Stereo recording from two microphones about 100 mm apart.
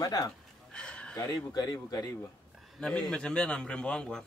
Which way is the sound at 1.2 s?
40° left (ahead or behind).